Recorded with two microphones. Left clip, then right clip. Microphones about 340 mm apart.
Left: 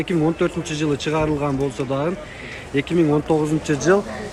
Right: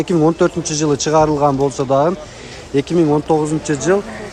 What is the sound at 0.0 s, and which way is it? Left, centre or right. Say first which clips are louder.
Speech: right 6 dB; centre.